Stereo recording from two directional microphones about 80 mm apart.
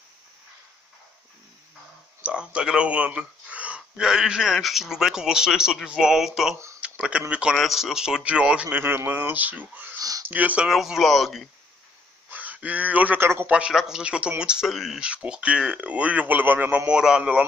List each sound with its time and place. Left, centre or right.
2.2 s speech: centre
6.8 s speech: centre
7.5 s speech: centre
8.6 s speech: right
9.9 s a sound: right
10.2 s speech: centre
10.7 s speech: centre
12.3 s speech: centre
14.7 s speech: centre
15.0 s speech: centre